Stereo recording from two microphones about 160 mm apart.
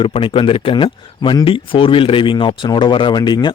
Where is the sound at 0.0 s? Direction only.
35° left (ahead or behind).